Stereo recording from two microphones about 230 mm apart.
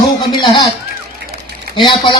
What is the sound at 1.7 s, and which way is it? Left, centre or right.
Speech, left.